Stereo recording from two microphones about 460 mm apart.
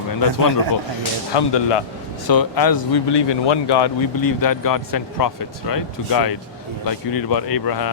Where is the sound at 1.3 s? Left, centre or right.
Left.